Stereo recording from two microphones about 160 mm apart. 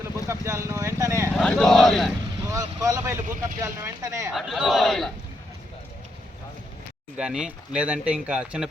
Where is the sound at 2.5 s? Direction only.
20° right (ahead or behind).